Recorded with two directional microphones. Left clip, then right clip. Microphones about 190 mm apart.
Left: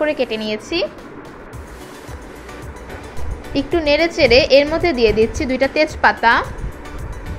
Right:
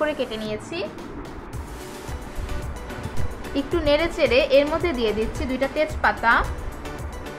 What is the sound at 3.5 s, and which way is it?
A woman's voice, 10° left (ahead or behind).